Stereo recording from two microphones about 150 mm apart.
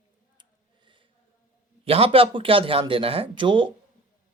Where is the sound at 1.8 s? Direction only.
40° right (ahead or behind).